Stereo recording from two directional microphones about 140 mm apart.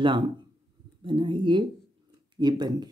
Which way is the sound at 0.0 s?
35° right (ahead or behind).